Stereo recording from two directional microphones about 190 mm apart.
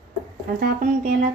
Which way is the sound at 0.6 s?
45° right (ahead or behind).